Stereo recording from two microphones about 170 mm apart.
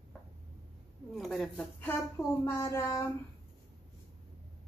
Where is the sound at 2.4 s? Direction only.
15° left (ahead or behind).